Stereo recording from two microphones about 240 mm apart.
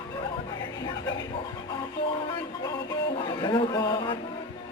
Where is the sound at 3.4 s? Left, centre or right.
Centre.